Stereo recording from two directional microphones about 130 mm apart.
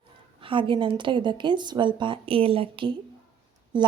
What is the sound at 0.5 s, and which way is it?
A woman's voice, 40° right (ahead or behind).